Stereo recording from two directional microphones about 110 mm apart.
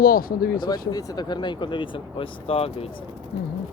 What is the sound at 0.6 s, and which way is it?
Speech, 35° left (ahead or behind).